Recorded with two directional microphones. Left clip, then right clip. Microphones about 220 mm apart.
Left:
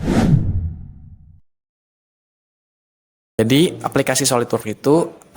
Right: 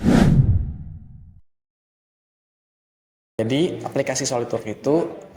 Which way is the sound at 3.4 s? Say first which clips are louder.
Left 6 dB; 45° left (ahead or behind).